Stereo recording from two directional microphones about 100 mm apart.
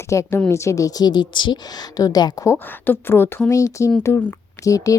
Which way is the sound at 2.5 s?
20° left (ahead or behind).